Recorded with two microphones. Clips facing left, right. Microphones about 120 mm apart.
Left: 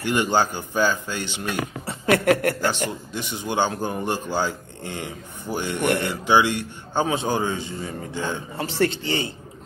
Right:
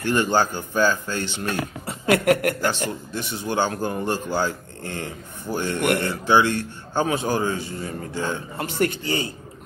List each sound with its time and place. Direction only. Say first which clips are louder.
0.0 s speech: right 1 dB; 15° left (ahead or behind)
1.9 s speech: even; 30° left (ahead or behind)
2.6 s speech: even; 15° left (ahead or behind)